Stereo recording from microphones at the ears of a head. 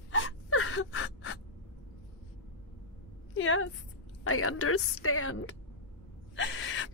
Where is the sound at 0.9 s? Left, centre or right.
Left.